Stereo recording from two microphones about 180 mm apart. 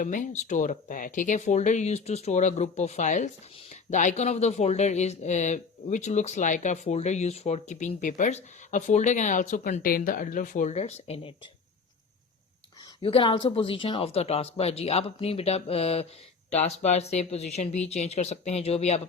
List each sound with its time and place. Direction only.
0.0 s speech: 45° left (ahead or behind)
13.0 s speech: 30° left (ahead or behind)